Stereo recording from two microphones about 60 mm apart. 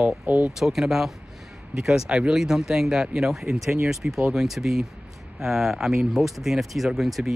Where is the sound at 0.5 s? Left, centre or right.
Centre.